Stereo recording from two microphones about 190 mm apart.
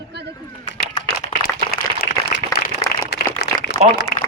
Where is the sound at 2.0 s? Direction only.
50° left (ahead or behind).